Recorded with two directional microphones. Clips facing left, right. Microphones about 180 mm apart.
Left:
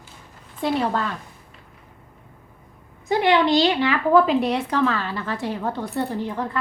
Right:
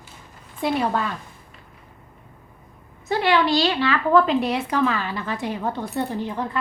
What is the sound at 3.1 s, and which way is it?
A woman's voice, 20° left (ahead or behind).